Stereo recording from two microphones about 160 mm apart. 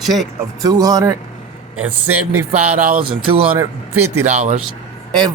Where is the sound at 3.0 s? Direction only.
35° right (ahead or behind).